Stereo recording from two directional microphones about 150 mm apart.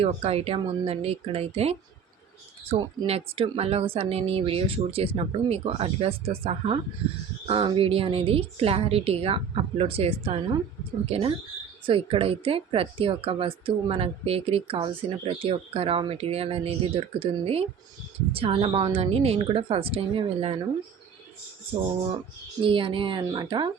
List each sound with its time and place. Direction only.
0.0 s speech: 40° right (ahead or behind)
22.6 s speech: 35° right (ahead or behind)